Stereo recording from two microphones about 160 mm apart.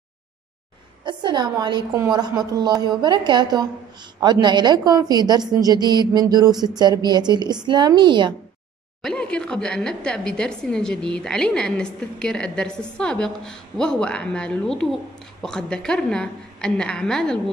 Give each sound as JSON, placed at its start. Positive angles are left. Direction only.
{"t": 1.0, "sound": "a woman's voice", "side_deg": -30}
{"t": 9.0, "sound": "a woman's voice", "side_deg": 5}